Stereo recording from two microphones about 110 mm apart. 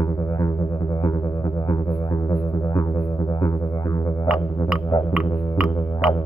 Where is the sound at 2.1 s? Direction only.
30° left (ahead or behind).